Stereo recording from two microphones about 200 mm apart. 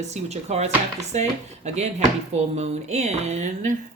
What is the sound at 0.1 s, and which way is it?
Speech, 35° right (ahead or behind).